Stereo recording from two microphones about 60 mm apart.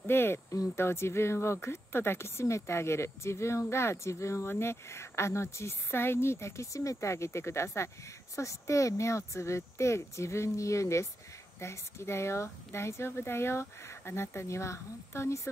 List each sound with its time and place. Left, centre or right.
0.0 s speech: left